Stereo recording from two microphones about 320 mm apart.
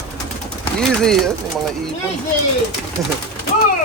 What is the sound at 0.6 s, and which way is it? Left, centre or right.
A man's voice, centre.